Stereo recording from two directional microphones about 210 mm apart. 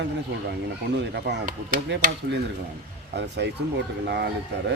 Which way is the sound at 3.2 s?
55° right (ahead or behind).